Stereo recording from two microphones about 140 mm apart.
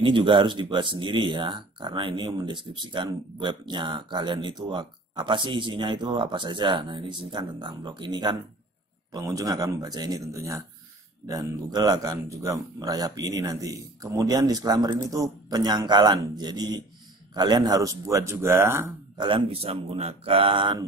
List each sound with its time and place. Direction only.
0.0 s speech: 35° right (ahead or behind); by 18.9 s 20° right (ahead or behind)
19.1 s speech: 35° right (ahead or behind)